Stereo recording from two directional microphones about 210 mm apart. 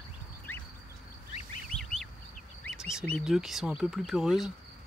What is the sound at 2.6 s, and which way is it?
Speech, centre (ahead or behind).